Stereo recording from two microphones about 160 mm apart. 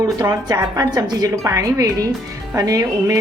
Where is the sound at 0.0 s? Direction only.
25° right (ahead or behind).